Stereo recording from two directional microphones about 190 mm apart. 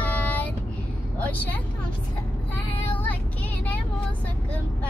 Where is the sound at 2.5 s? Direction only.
10° left (ahead or behind).